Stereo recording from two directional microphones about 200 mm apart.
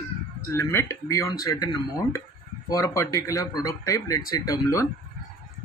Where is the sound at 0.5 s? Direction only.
15° left (ahead or behind).